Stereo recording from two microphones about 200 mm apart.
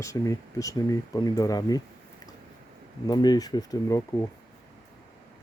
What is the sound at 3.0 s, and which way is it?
Speech, 20° left (ahead or behind).